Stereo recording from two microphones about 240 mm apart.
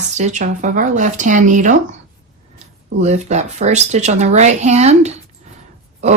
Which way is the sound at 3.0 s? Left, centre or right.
Right.